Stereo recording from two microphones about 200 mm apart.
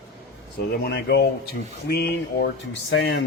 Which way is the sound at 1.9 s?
55° left (ahead or behind).